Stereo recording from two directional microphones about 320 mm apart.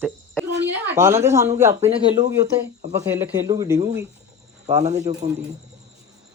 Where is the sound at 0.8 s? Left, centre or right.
Centre.